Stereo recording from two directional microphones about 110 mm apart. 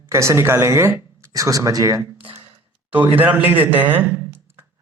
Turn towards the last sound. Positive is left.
turn(degrees=-20)  # may be behind; listen again after turning